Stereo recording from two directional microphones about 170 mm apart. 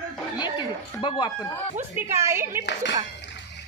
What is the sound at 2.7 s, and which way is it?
Speech, 90° left.